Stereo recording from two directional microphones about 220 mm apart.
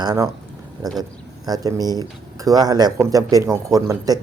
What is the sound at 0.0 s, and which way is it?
Speech, 20° right (ahead or behind).